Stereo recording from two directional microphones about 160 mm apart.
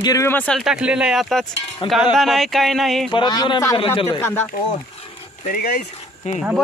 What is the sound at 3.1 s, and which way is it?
Speech, 30° left (ahead or behind).